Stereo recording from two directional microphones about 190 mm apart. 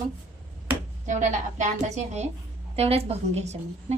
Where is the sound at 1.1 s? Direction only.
40° right (ahead or behind).